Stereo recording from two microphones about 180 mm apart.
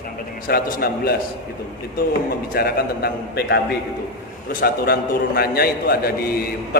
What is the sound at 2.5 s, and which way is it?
A man's voice, 60° left (ahead or behind).